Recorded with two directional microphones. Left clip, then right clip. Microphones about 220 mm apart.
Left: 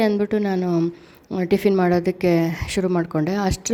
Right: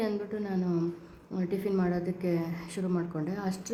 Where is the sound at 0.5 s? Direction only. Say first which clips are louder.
Left 10 dB; 35° left (ahead or behind).